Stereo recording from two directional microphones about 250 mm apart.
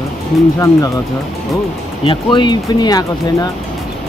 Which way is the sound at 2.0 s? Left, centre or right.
Left.